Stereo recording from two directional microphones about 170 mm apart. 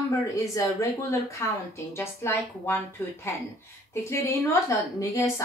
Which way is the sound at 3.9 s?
15° left (ahead or behind).